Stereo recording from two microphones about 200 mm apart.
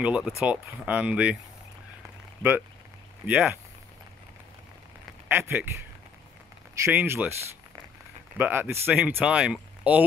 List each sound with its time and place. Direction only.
0.0 s speech: 5° right (ahead or behind)
3.3 s speech: 5° right (ahead or behind)
5.3 s speech: 10° right (ahead or behind)
8.4 s speech: 10° right (ahead or behind)